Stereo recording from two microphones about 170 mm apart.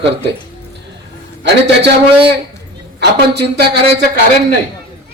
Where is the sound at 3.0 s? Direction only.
80° right.